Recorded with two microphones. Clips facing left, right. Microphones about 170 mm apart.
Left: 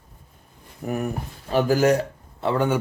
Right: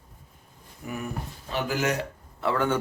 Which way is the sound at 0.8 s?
45° left (ahead or behind).